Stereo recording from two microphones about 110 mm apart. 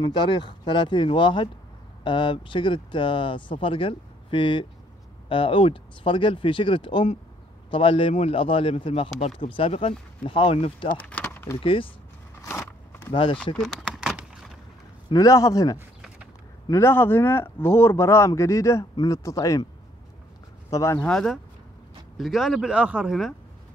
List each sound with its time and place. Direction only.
0.0 s speech: 45° left (ahead or behind)
11.0 s a sound: 15° left (ahead or behind)
11.6 s speech: 55° left (ahead or behind)
12.4 s vehicle: 25° left (ahead or behind)
13.1 s speech: 50° left (ahead or behind)
13.6 s a sound: centre (ahead or behind)
15.0 s speech: 30° left (ahead or behind)
16.7 s speech: 20° left (ahead or behind)
20.7 s speech: 30° left (ahead or behind)
21.0 s speech: 5° left (ahead or behind); by 23.1 s 10° right (ahead or behind)